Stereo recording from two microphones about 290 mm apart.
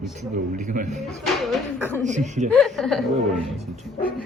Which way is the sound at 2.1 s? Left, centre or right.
Right.